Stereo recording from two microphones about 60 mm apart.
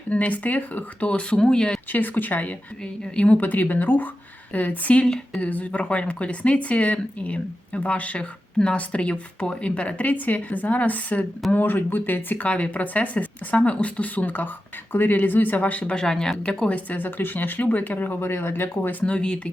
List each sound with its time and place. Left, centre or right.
0.1 s speech: left
1.9 s speech: left
2.8 s speech: centre
5.0 s speech: centre
5.4 s speech: left
16.0 s speech: centre; by 18.2 s left
18.2 s speech: left
19.0 s speech: centre